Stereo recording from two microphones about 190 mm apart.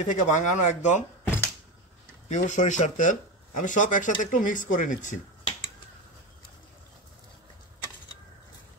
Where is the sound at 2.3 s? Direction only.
40° left (ahead or behind).